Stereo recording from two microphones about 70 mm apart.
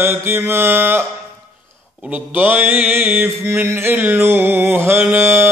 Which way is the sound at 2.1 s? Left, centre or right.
Right.